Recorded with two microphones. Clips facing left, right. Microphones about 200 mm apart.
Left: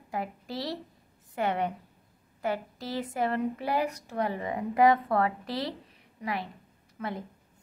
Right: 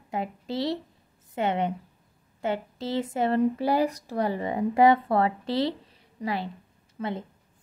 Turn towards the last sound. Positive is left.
turn(degrees=-30)  # may be behind; listen again after turning